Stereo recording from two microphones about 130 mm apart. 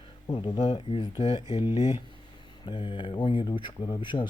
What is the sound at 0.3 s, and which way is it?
Speech, 45° left (ahead or behind).